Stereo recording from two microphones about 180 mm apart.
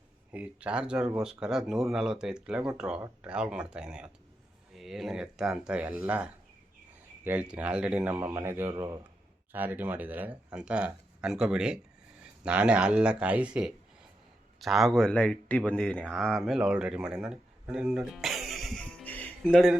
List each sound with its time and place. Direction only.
0.3 s speech: 10° right (ahead or behind)
9.5 s speech: 10° right (ahead or behind); by 19.3 s 10° left (ahead or behind)
19.5 s speech: 5° right (ahead or behind)